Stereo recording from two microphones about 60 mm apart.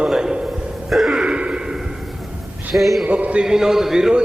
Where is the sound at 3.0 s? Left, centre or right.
Right.